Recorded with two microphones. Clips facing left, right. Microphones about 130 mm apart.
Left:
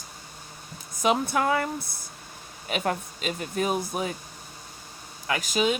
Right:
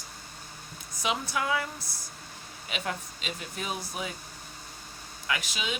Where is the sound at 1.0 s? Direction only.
50° left (ahead or behind).